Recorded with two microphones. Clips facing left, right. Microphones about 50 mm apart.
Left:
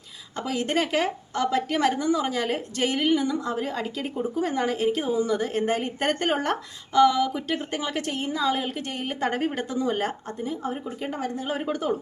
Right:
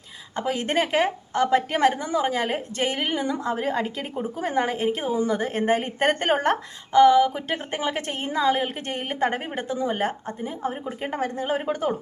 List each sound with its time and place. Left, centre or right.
0.3 s a woman's voice: right
9.2 s a woman's voice: centre